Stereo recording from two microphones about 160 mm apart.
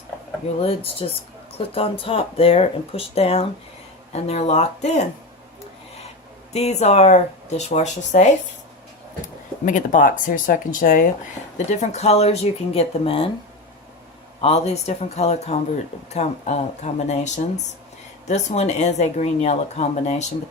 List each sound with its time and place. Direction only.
0.6 s speech: 35° left (ahead or behind)
6.5 s speech: 45° left (ahead or behind)
9.6 s speech: 55° left (ahead or behind)
11.5 s speech: 45° left (ahead or behind)
14.4 s speech: 40° left (ahead or behind)